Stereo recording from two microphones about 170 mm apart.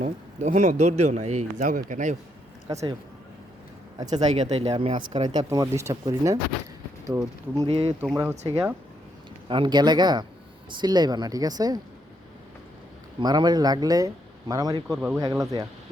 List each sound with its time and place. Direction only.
0.0 s speech: 45° right (ahead or behind)
2.7 s speech: 30° right (ahead or behind)
3.9 s speech: 20° right (ahead or behind)
4.2 s speech: 40° right (ahead or behind); by 6.3 s 20° right (ahead or behind)
7.7 s speech: 35° right (ahead or behind)
8.1 s speech: 15° right (ahead or behind)
9.5 s speech: 25° right (ahead or behind)
13.1 s speech: 25° right (ahead or behind)
14.9 s speech: 5° right (ahead or behind)
15.2 s speech: 20° right (ahead or behind)